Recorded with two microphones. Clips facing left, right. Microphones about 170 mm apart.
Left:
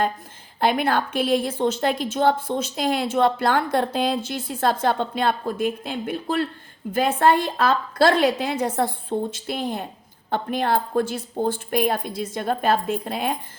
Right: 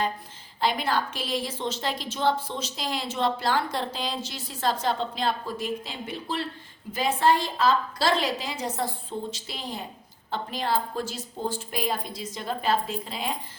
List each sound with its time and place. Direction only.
0.6 s a woman's voice: 55° left (ahead or behind)